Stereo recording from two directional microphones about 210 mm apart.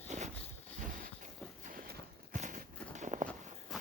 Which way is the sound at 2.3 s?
40° right (ahead or behind).